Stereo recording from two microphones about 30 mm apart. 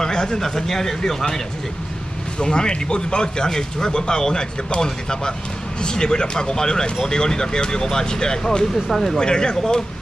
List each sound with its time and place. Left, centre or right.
0.0 s a sound: left
0.4 s speech: centre
2.3 s speech: left
8.7 s speech: centre
9.2 s speech: left